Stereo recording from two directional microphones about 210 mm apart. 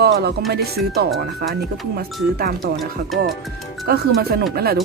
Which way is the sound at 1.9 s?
45° right (ahead or behind).